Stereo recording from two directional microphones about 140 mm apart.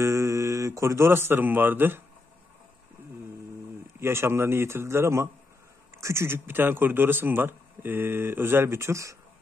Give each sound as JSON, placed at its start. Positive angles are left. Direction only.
{"t": 0.0, "sound": "speech", "side_deg": -20}
{"t": 4.0, "sound": "a man's voice", "side_deg": -20}